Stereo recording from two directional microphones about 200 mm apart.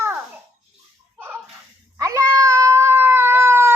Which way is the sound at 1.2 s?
10° right (ahead or behind).